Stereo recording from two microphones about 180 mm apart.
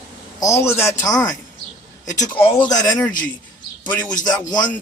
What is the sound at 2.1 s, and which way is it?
Speech, 20° left (ahead or behind).